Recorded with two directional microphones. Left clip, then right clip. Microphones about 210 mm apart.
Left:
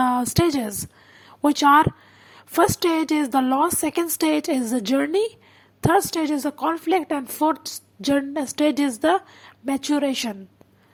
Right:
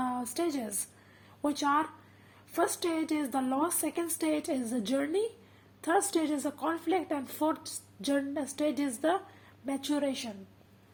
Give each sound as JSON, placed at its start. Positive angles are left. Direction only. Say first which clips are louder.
{"t": 0.0, "sound": "a woman's voice", "louder": "left 13 dB", "side_deg": 35}